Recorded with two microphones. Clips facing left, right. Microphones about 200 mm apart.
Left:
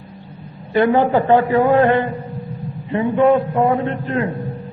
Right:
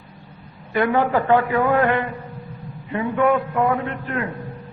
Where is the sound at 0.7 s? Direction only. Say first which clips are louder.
Left 5 dB; 30° left (ahead or behind).